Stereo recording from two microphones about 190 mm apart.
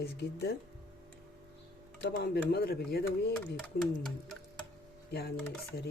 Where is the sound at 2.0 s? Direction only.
60° left (ahead or behind).